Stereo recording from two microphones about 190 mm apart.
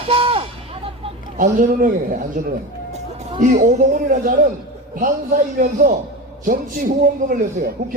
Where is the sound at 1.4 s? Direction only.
45° right (ahead or behind).